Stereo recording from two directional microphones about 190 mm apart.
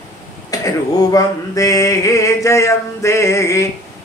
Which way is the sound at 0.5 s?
20° left (ahead or behind).